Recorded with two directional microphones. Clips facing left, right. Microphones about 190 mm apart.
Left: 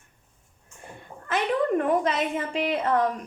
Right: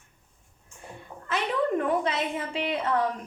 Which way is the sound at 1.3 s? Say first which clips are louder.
Left 3 dB; 50° left (ahead or behind).